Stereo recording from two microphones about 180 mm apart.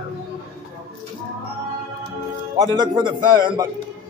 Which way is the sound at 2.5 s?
20° right (ahead or behind).